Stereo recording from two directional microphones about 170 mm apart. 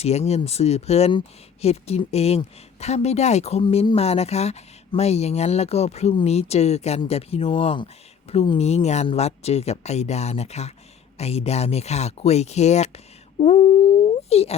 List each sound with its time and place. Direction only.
0.0 s speech: 40° left (ahead or behind)